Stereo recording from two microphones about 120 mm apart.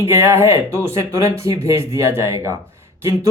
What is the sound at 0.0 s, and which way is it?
Speech, 20° right (ahead or behind).